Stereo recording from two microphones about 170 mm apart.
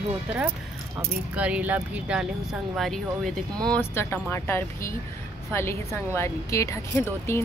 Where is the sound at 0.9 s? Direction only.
5° right (ahead or behind).